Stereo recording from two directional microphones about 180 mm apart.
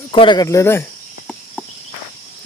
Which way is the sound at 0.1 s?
25° left (ahead or behind).